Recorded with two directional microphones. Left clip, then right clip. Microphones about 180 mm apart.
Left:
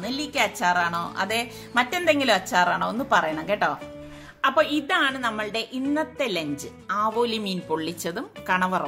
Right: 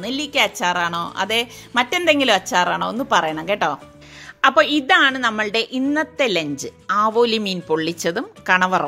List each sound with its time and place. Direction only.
0.0 s a woman's voice: 45° right (ahead or behind)